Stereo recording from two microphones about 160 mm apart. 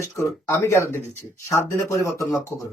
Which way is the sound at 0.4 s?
15° left (ahead or behind).